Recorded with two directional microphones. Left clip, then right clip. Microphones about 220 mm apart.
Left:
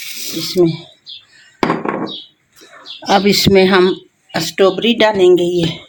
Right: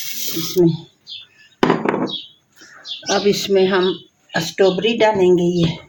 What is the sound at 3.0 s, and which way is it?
Speech, 40° left (ahead or behind).